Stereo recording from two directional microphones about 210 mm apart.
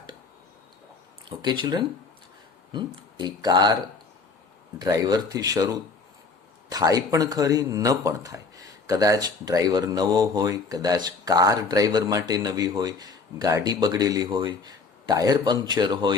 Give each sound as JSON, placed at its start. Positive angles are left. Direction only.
{"t": 1.3, "sound": "speech", "side_deg": -20}
{"t": 4.8, "sound": "speech", "side_deg": -20}